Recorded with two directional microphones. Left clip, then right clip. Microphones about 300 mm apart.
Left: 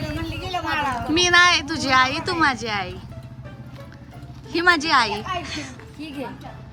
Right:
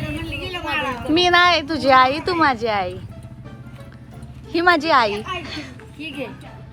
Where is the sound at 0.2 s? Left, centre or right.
Centre.